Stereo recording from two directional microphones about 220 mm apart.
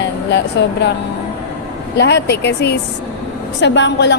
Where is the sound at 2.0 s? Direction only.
50° left (ahead or behind).